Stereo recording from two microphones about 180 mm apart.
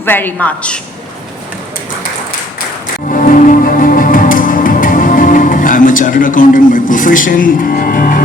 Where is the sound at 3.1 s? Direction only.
50° left (ahead or behind).